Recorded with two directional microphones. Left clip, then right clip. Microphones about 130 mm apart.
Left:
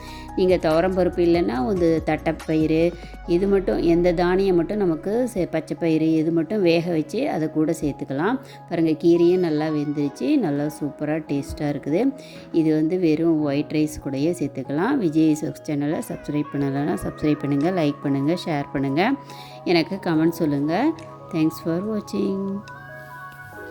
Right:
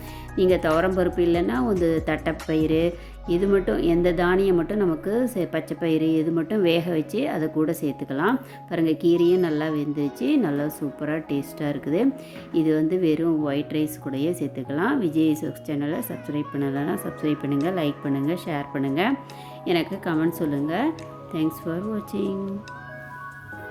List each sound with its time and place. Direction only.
0.3 s speech: 25° left (ahead or behind)